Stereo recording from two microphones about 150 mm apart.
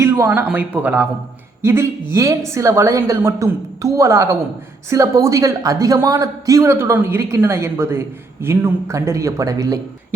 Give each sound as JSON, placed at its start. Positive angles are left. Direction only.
{"t": 0.0, "sound": "a man's voice", "side_deg": -15}